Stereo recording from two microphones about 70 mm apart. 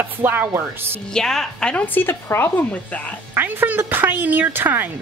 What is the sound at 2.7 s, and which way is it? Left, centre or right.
Speech, left.